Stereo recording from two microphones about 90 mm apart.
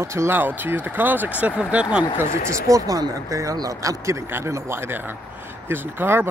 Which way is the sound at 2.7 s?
40° right (ahead or behind).